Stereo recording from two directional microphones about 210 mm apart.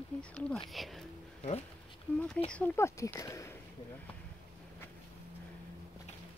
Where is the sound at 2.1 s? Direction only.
5° left (ahead or behind).